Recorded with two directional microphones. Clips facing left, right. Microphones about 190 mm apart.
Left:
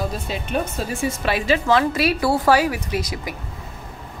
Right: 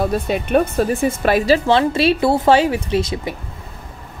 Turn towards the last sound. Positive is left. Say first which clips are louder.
# right 6 dB
turn(degrees=-25)  # may be behind; listen again after turning